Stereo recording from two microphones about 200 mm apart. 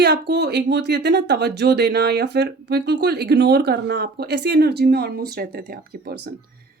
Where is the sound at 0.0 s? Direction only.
55° right (ahead or behind).